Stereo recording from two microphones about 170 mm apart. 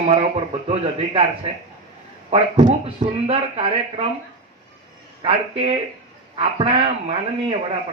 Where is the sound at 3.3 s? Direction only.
35° right (ahead or behind).